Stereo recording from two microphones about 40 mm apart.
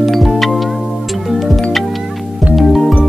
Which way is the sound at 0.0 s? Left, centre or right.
Centre.